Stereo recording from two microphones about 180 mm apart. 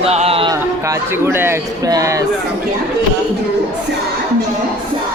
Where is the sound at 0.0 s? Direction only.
35° right (ahead or behind).